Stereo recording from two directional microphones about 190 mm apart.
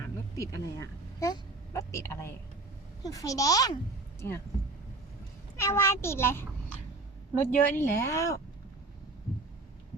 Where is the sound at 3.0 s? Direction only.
20° left (ahead or behind).